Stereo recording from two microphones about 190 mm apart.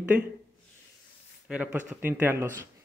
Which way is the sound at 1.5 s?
5° right (ahead or behind).